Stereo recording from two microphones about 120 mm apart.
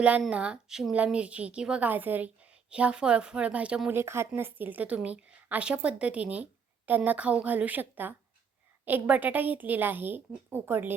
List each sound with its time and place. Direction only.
0.3 s a woman's voice: 10° right (ahead or behind)
3.9 s a woman's voice: 20° right (ahead or behind)